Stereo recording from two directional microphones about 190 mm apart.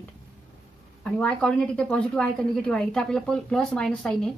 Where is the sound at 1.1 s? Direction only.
5° left (ahead or behind).